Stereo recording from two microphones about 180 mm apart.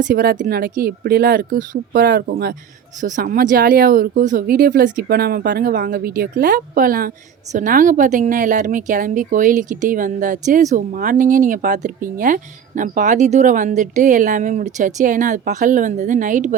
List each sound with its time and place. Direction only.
0.0 s speech: 55° right (ahead or behind)